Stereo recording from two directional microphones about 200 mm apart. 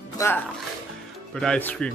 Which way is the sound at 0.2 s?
15° left (ahead or behind).